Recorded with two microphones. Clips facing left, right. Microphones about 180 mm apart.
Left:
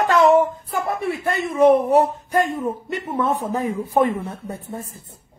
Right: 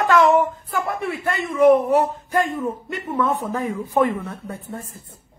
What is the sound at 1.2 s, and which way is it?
Speech, 25° left (ahead or behind).